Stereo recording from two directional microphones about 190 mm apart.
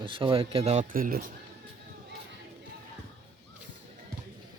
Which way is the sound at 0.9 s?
50° right (ahead or behind).